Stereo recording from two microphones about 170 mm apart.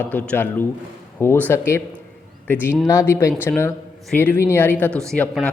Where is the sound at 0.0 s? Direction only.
10° left (ahead or behind).